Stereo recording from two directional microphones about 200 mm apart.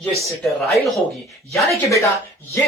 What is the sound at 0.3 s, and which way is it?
Speech, centre (ahead or behind).